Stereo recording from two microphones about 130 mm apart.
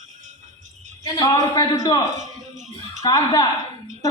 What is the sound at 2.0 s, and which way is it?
Speech, 70° right (ahead or behind).